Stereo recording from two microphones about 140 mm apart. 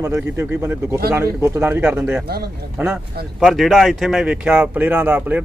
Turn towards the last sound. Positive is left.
turn(degrees=-15)  # may be behind; listen again after turning